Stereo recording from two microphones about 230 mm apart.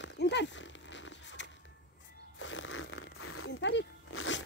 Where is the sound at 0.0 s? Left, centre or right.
Left.